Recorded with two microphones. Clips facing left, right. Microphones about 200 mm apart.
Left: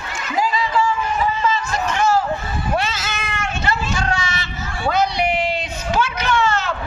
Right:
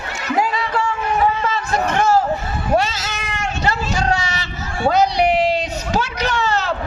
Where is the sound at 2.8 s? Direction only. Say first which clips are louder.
Right 3 dB; 40° right (ahead or behind).